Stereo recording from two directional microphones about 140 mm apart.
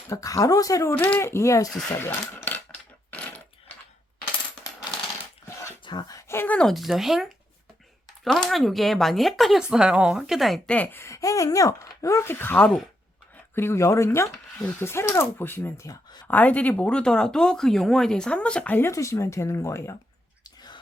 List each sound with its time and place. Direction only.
0.1 s speech: 25° left (ahead or behind)
3.1 s a sound: 10° left (ahead or behind)
5.8 s speech: 30° left (ahead or behind)
20.4 s whispering: 30° left (ahead or behind)